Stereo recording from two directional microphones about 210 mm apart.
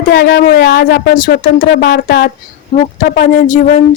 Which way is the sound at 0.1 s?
50° left (ahead or behind).